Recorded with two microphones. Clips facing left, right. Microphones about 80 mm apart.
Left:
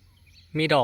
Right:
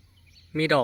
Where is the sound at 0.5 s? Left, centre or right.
Right.